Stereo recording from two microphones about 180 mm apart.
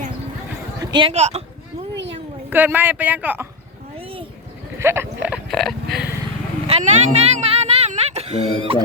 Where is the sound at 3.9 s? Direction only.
30° right (ahead or behind).